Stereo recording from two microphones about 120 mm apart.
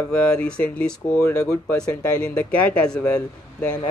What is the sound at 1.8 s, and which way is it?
Speech, 10° left (ahead or behind).